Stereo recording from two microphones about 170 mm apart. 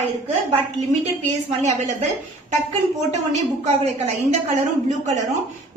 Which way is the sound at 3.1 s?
45° right (ahead or behind).